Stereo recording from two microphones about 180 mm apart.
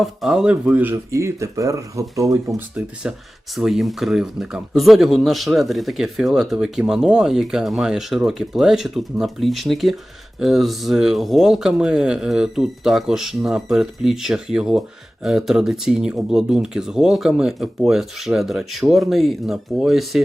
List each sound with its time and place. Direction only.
0.0 s speech: centre (ahead or behind); by 2.6 s 15° right (ahead or behind)
2.7 s speech: 5° right (ahead or behind)